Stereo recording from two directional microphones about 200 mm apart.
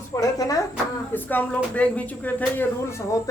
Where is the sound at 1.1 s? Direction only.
10° left (ahead or behind).